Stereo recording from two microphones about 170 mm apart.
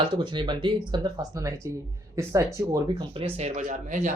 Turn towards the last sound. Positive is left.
turn(degrees=-45)  # may be behind; listen again after turning